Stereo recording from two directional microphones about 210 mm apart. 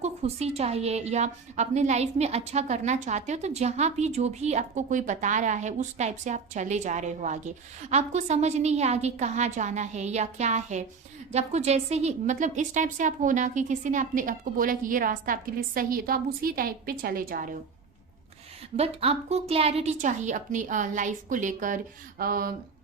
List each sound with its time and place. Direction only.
0.0 s a woman's voice: 30° right (ahead or behind)
18.8 s a woman's voice: 30° right (ahead or behind)
22.2 s a sound: 45° right (ahead or behind)